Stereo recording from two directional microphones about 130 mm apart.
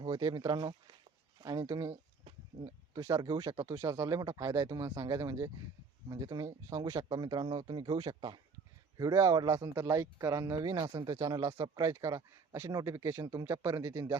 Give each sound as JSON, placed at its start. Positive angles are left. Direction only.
{"t": 0.0, "sound": "speech", "side_deg": -30}
{"t": 9.0, "sound": "speech", "side_deg": -25}